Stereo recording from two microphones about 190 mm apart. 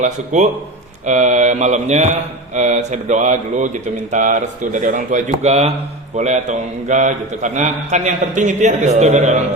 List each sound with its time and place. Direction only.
0.3 s a man's voice: 40° right (ahead or behind)